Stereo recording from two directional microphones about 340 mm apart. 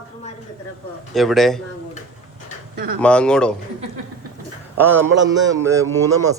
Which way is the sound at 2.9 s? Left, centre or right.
Centre.